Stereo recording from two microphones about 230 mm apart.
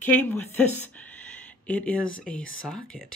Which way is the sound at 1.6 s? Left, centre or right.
Centre.